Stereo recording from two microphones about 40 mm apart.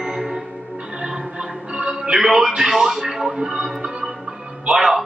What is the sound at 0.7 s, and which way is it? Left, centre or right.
Music, centre.